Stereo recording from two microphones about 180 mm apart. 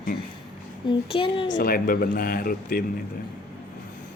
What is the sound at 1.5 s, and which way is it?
Speech, 55° left (ahead or behind).